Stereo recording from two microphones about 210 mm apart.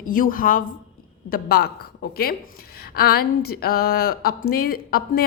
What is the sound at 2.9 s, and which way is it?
A woman's voice, 45° left (ahead or behind).